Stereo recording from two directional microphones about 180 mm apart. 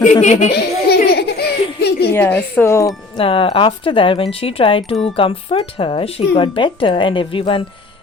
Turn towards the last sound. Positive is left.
turn(degrees=30)  # may be behind; listen again after turning